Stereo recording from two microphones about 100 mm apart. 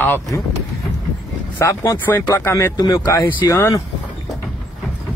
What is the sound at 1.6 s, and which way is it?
A man's voice, 35° left (ahead or behind).